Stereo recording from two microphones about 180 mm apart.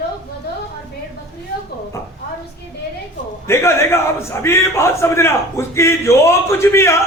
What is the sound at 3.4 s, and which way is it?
A man's voice, 15° left (ahead or behind).